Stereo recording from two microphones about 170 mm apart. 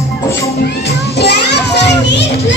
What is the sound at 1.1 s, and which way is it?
A child's voice, 80° left.